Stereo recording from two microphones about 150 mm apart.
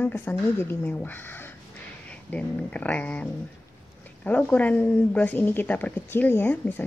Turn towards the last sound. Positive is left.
turn(degrees=10)  # may be behind; listen again after turning